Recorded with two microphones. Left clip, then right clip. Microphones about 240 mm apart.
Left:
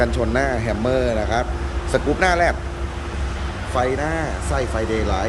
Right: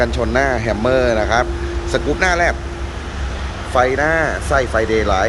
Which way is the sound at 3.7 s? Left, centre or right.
Centre.